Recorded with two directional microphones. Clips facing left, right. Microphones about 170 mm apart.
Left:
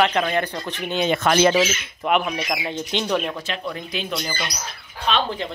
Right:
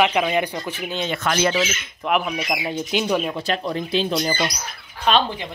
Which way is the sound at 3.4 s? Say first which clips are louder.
Right 5 dB; 35° right (ahead or behind).